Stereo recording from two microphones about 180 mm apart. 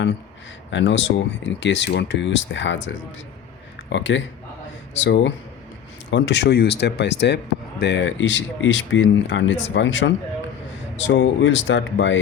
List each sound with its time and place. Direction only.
0.7 s speech: 90° left